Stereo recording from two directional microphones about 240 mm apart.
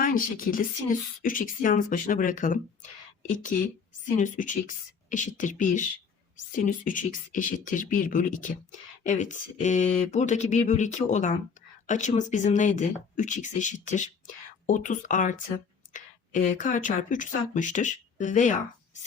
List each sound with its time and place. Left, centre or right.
0.0 s speech: left